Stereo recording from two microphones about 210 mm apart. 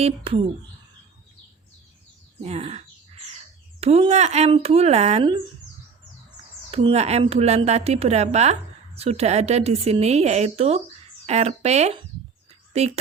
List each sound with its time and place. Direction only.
0.0 s speech: 25° right (ahead or behind)
2.4 s speech: 30° right (ahead or behind)
6.7 s a woman's voice: 30° right (ahead or behind)